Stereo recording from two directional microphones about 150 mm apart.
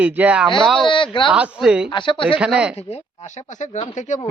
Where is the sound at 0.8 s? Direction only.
35° left (ahead or behind).